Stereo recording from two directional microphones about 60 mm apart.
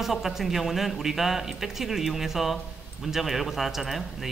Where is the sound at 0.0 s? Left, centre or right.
Centre.